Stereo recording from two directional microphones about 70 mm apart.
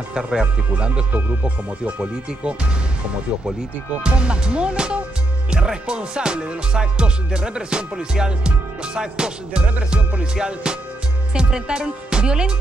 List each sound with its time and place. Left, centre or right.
0.1 s music: centre
1.1 s speech: right
4.0 s music: centre